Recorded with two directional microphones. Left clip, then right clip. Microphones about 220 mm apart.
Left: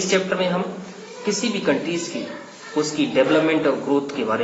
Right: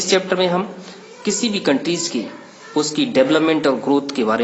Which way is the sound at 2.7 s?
50° right (ahead or behind).